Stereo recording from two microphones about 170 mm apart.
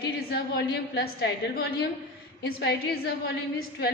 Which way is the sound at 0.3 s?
70° left (ahead or behind).